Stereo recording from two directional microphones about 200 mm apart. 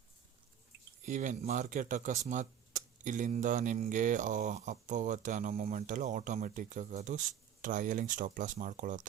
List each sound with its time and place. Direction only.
1.0 s speech: 40° right (ahead or behind)